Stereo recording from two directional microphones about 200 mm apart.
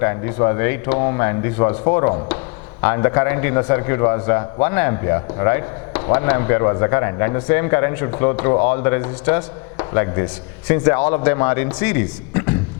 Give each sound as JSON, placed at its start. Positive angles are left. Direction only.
{"t": 0.0, "sound": "a man's voice", "side_deg": 15}